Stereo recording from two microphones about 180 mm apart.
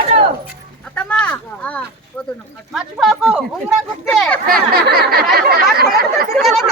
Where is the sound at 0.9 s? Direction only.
5° left (ahead or behind).